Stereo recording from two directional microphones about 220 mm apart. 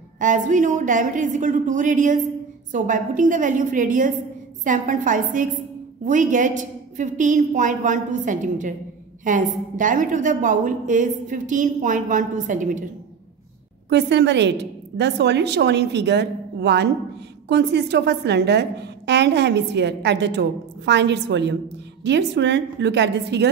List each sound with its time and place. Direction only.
0.2 s a woman's voice: 35° right (ahead or behind)
13.8 s a woman's voice: 50° right (ahead or behind)